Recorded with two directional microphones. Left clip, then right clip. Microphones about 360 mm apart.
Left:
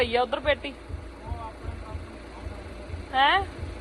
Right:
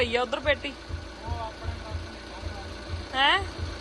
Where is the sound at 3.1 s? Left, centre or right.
Centre.